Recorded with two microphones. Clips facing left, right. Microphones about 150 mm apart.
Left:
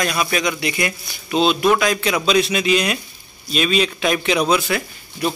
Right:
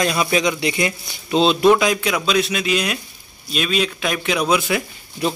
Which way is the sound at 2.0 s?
Centre (ahead or behind).